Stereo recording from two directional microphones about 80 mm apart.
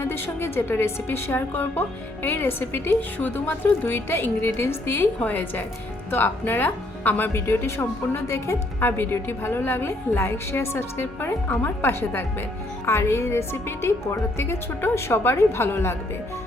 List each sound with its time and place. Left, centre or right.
0.0 s a woman's voice: left
8.8 s a woman's voice: left